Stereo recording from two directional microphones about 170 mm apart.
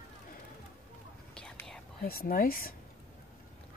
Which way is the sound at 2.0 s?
60° left (ahead or behind).